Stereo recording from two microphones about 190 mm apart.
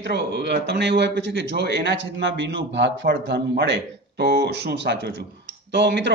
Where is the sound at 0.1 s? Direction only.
65° right (ahead or behind).